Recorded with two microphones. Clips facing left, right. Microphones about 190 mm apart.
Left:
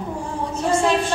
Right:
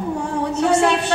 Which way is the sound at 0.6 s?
70° right (ahead or behind).